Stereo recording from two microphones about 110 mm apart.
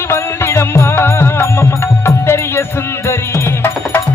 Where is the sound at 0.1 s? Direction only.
25° left (ahead or behind).